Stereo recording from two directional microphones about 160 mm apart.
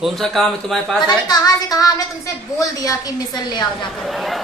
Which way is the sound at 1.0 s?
25° left (ahead or behind).